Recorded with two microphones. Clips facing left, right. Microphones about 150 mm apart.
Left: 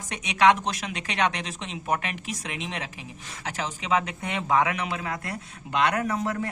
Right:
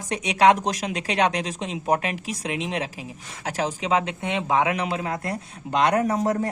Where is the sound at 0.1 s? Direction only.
35° right (ahead or behind).